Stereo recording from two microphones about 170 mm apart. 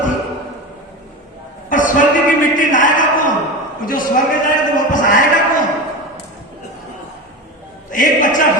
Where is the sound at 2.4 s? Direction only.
50° left (ahead or behind).